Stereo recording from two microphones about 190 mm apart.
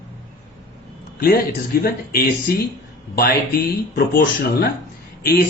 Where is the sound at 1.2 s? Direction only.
55° left (ahead or behind).